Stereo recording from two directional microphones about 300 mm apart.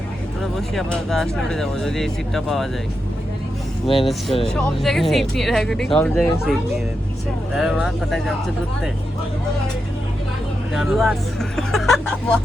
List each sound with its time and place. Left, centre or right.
0.5 s speech: centre
3.8 s speech: centre
4.4 s speech: centre
10.8 s speech: centre